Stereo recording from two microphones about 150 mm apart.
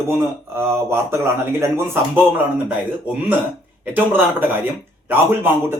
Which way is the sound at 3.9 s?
15° right (ahead or behind).